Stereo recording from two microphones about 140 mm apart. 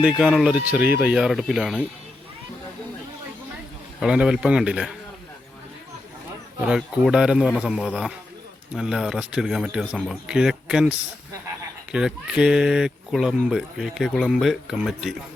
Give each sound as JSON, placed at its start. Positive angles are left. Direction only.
{"t": 0.0, "sound": "speech", "side_deg": -5}
{"t": 4.0, "sound": "speech", "side_deg": -5}
{"t": 6.6, "sound": "speech", "side_deg": -5}